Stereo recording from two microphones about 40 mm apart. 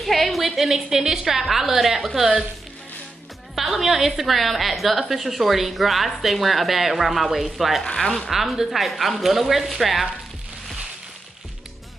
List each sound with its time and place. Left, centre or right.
0.0 s a woman's voice: centre
3.5 s a woman's voice: centre
7.8 s speech: centre
8.3 s a woman's voice: centre